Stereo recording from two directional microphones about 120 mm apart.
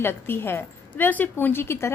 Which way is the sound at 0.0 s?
20° left (ahead or behind).